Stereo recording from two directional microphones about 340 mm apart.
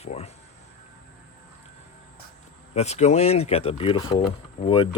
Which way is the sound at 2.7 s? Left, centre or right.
Centre.